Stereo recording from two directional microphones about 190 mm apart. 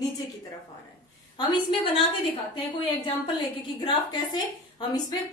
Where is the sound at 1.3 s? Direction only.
30° left (ahead or behind).